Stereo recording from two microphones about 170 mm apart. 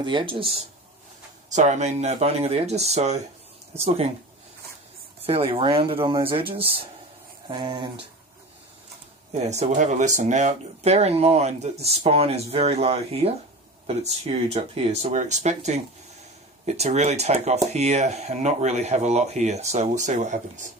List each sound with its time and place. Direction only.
0.0 s speech: 30° right (ahead or behind)
1.5 s speech: 45° right (ahead or behind)
5.2 s speech: 35° right (ahead or behind)
9.3 s speech: 40° right (ahead or behind)